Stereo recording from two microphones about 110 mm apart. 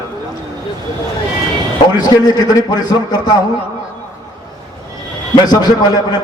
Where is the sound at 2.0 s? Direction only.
35° left (ahead or behind).